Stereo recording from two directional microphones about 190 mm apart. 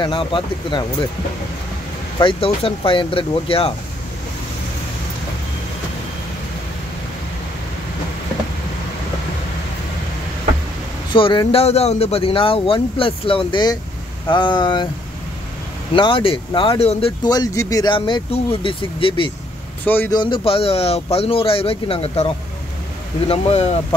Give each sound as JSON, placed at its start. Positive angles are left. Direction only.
{"t": 0.0, "sound": "speech", "side_deg": 25}
{"t": 2.1, "sound": "speech", "side_deg": 30}
{"t": 11.1, "sound": "speech", "side_deg": 25}
{"t": 15.9, "sound": "speech", "side_deg": 25}
{"t": 19.8, "sound": "a man's voice", "side_deg": 10}
{"t": 20.1, "sound": "speech", "side_deg": 25}